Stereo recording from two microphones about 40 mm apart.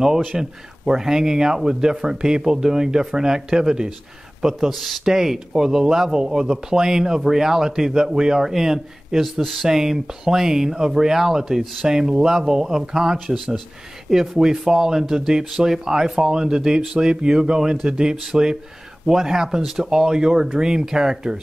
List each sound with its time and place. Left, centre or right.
0.4 s speech: centre
4.7 s speech: centre
5.0 s speech: centre
9.2 s speech: centre
14.1 s speech: centre